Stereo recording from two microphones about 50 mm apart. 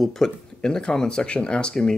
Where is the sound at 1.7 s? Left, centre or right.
Centre.